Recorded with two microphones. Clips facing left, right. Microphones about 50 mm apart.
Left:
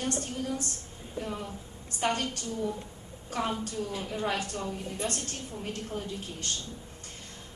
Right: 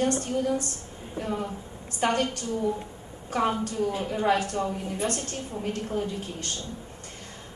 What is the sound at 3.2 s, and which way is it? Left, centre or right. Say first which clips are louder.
Speech: right 6 dB; right.